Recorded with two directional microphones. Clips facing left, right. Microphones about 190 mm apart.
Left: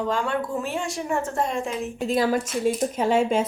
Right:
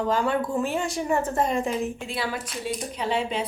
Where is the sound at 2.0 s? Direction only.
45° left (ahead or behind).